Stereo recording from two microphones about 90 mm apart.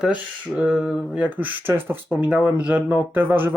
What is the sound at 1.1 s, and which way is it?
Speech, 15° right (ahead or behind).